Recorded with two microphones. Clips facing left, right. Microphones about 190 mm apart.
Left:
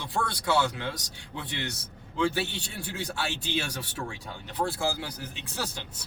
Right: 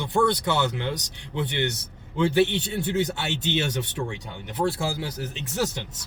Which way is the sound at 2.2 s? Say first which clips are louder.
Right 7 dB; 20° right (ahead or behind).